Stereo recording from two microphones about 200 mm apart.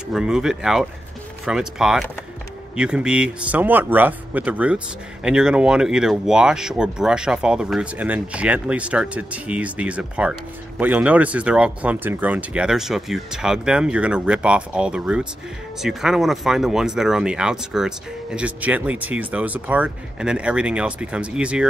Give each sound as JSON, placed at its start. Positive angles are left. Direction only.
{"t": 0.1, "sound": "speech", "side_deg": -5}